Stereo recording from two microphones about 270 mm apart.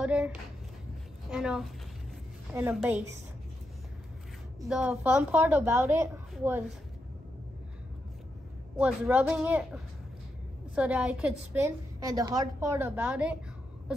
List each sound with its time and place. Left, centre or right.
0.0 s a woman's voice: centre
4.6 s a woman's voice: centre
8.7 s a woman's voice: centre